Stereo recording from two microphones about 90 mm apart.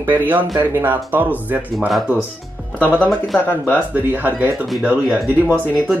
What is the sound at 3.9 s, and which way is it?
Speech, 20° right (ahead or behind).